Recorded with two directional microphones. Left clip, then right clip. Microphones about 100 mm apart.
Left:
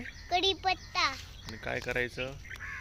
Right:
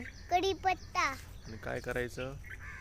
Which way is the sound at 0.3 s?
50° right (ahead or behind).